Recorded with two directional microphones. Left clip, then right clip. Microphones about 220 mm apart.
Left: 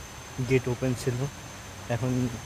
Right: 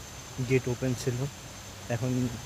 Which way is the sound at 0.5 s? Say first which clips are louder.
Left 2 dB; centre (ahead or behind).